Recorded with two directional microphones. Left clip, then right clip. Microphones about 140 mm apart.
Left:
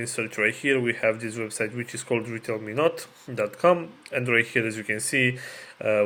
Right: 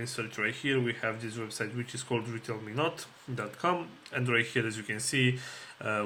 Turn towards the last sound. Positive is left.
turn(degrees=30)  # may be behind; listen again after turning